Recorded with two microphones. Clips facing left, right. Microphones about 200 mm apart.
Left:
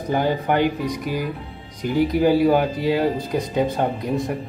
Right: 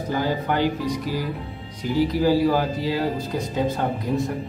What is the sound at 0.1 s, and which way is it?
Speech, 20° left (ahead or behind).